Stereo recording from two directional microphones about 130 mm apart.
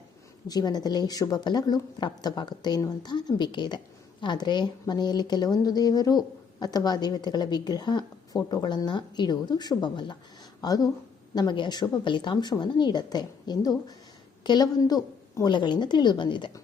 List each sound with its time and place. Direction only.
0.4 s speech: 30° left (ahead or behind)